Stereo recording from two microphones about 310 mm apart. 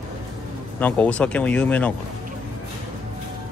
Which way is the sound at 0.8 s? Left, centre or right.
Centre.